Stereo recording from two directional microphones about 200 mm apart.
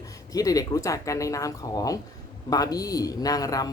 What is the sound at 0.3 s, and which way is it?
A man's voice, 15° left (ahead or behind).